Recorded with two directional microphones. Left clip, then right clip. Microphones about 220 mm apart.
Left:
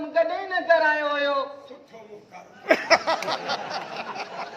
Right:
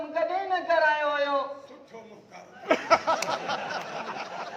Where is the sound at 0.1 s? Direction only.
45° left (ahead or behind).